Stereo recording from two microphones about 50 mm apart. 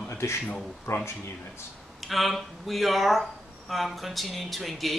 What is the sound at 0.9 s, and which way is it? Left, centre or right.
Speech, left.